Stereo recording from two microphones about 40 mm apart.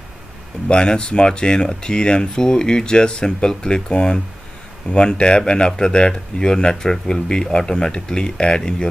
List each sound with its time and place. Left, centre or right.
0.7 s speech: left